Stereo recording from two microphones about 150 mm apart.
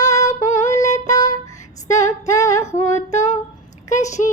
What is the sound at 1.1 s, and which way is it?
Music, 25° left (ahead or behind).